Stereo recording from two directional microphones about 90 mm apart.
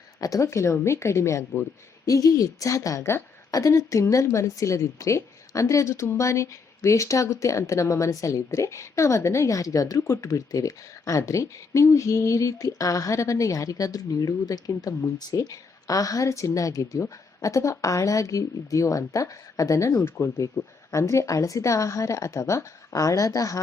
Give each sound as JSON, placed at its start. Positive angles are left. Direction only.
{"t": 0.2, "sound": "a woman's voice", "side_deg": 35}